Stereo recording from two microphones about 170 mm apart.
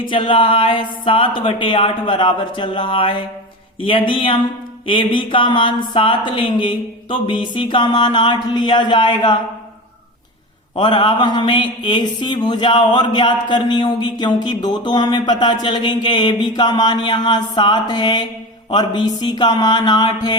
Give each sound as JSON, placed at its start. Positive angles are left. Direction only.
{"t": 0.0, "sound": "mantra", "side_deg": 30}
{"t": 3.8, "sound": "speech", "side_deg": 30}
{"t": 4.9, "sound": "mantra", "side_deg": 30}
{"t": 10.8, "sound": "mantra", "side_deg": 25}